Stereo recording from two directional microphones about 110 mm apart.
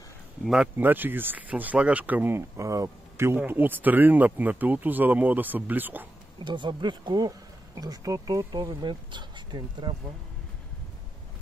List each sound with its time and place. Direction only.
0.5 s speech: 15° right (ahead or behind)
6.4 s speech: 45° right (ahead or behind)